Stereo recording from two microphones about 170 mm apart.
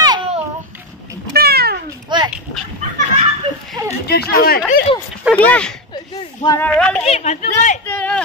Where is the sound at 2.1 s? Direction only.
25° right (ahead or behind).